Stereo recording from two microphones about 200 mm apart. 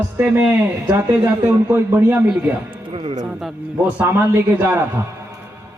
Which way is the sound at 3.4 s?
10° right (ahead or behind).